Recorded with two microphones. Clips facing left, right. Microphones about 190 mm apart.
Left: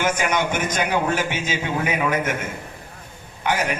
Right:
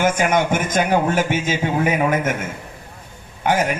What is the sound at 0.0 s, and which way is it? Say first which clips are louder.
A man's voice: right 4 dB; 50° right (ahead or behind).